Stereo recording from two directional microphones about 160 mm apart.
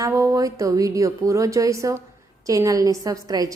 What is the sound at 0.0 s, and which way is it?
A woman's voice, 20° right (ahead or behind).